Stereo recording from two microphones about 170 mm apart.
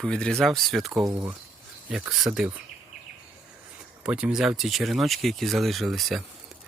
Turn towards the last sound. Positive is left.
turn(degrees=0)  # may be behind; listen again after turning